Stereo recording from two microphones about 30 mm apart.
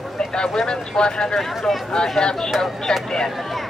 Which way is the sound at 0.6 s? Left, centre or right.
Left.